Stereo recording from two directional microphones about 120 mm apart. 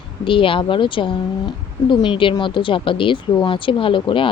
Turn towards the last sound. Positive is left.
turn(degrees=45)  # may be behind; listen again after turning